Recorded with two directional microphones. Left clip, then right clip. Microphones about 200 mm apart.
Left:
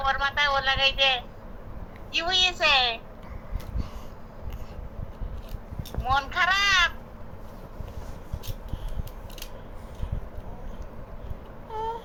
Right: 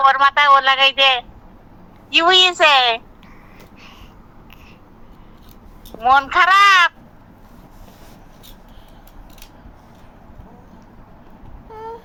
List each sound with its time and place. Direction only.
0.0 s speech: 50° right (ahead or behind)
6.0 s speech: 50° right (ahead or behind)
11.7 s a sound: 10° right (ahead or behind)